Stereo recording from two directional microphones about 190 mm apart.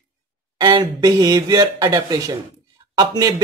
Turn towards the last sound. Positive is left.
turn(degrees=-20)  # may be behind; listen again after turning